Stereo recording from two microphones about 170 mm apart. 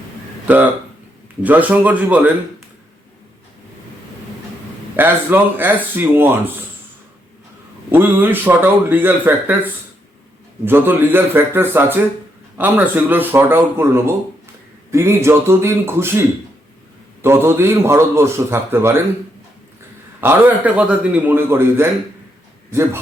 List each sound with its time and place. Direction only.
0.4 s speech: 10° right (ahead or behind)
4.9 s speech: 10° right (ahead or behind)
7.9 s speech: 10° right (ahead or behind)
17.2 s speech: 15° right (ahead or behind)
20.2 s speech: 10° right (ahead or behind)